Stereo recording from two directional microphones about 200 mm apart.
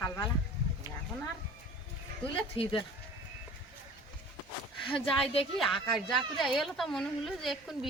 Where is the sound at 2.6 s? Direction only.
25° left (ahead or behind).